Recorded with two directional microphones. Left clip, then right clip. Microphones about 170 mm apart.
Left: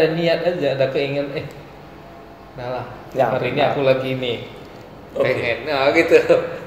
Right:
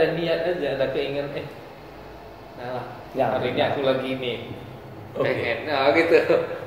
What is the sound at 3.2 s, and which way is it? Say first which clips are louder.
A man's voice: left 4 dB; 45° left (ahead or behind).